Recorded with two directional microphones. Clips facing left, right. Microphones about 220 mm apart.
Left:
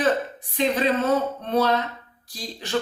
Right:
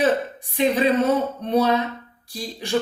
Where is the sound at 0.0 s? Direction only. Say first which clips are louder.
Right 2 dB; 15° right (ahead or behind).